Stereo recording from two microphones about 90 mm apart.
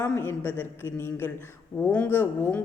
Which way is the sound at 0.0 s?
25° left (ahead or behind).